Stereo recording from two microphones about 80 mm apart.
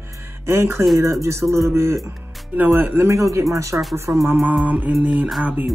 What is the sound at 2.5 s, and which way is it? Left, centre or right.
Speech, right.